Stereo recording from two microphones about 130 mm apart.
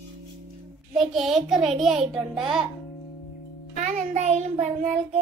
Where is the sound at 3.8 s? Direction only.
65° right (ahead or behind).